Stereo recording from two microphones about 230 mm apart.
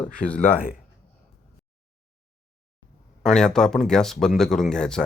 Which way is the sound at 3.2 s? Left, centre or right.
Centre.